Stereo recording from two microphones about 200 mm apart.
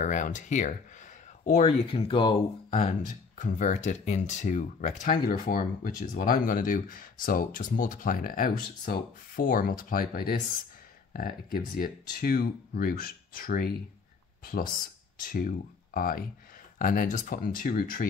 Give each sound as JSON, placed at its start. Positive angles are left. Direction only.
{"t": 0.0, "sound": "speech", "side_deg": 40}